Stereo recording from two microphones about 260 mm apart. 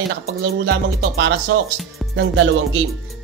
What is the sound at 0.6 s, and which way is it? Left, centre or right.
Music, right.